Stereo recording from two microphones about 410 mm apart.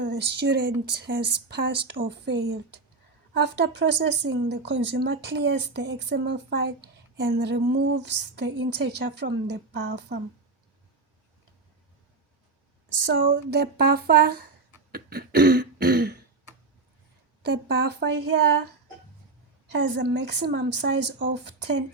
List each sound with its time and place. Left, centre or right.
0.0 s a woman's voice: right
13.1 s a woman's voice: right
14.9 s throat clearing: right
17.4 s a woman's voice: right
19.7 s a woman's voice: right